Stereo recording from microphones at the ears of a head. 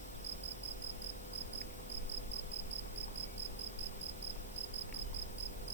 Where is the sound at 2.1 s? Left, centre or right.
Right.